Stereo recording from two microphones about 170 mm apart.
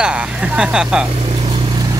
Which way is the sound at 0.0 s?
5° right (ahead or behind).